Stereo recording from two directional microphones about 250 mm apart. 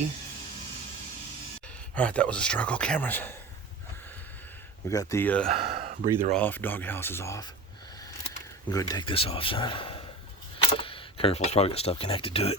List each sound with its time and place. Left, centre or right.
2.0 s speech: centre
4.9 s speech: centre
5.5 s a sound: right
6.3 s speech: centre
8.7 s speech: centre